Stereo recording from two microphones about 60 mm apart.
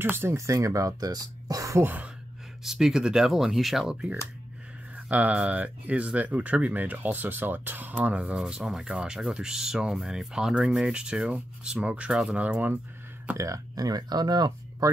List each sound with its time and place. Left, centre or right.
0.0 s speech: right
2.6 s speech: centre
4.9 s speech: right
8.4 s speech: centre
13.4 s speech: right